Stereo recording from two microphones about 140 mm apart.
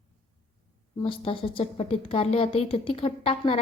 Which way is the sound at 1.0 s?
40° left (ahead or behind).